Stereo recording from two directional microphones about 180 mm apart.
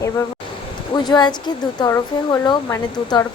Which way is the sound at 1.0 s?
25° left (ahead or behind).